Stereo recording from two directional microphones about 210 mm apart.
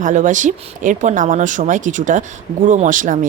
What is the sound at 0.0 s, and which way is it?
Speech, 35° right (ahead or behind).